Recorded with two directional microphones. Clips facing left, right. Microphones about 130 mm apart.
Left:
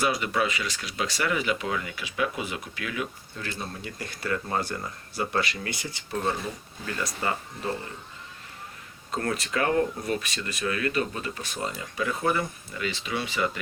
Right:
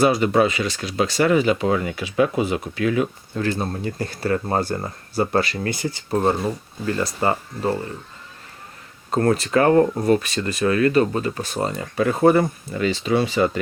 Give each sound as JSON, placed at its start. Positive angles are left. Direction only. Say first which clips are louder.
{"t": 0.0, "sound": "speech", "louder": "right 9 dB", "side_deg": -30}
{"t": 9.1, "sound": "speech", "louder": "right 10 dB", "side_deg": -40}
{"t": 11.8, "sound": "speech", "louder": "right 12 dB", "side_deg": -55}